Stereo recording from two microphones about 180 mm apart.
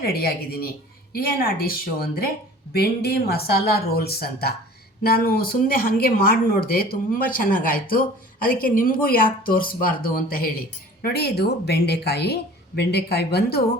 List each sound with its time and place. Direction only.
0.1 s speech: 60° left (ahead or behind)